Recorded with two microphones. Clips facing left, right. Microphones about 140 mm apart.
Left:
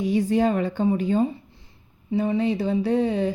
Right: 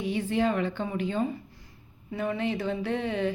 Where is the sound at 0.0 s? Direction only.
40° left (ahead or behind).